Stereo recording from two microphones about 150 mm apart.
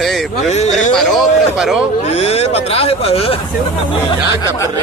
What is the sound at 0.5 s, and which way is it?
Speech, 50° left (ahead or behind).